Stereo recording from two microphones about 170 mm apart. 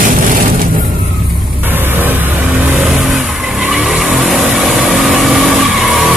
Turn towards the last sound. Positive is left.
turn(degrees=0)  # may be behind; listen again after turning